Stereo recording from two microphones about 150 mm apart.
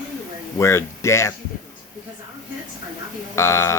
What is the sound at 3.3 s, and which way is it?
Speech, 20° left (ahead or behind).